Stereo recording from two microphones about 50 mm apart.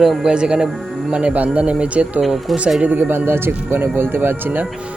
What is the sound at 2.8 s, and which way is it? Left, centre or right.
Speech, right.